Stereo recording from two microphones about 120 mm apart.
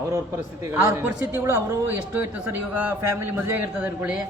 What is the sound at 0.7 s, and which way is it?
A man's voice, 20° right (ahead or behind).